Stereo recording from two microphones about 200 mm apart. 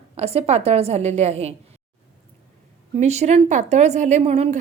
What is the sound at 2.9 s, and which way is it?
A woman's voice, 35° right (ahead or behind).